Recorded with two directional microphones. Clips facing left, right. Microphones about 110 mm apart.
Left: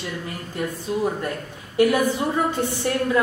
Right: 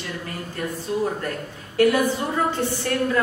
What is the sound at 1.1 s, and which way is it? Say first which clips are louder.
A man's voice: left 1 dB; 15° left (ahead or behind).